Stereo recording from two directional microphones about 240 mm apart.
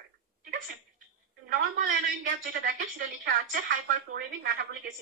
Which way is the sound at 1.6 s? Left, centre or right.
Right.